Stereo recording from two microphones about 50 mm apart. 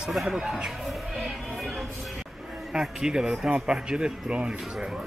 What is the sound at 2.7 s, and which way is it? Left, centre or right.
Speech, centre.